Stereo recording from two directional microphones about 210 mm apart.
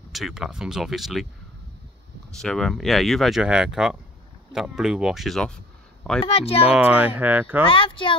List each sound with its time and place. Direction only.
0.1 s speech: centre (ahead or behind)
2.3 s speech: centre (ahead or behind)
6.2 s speech: 30° left (ahead or behind)
6.7 s speech: 5° right (ahead or behind)
7.6 s speech: 25° left (ahead or behind)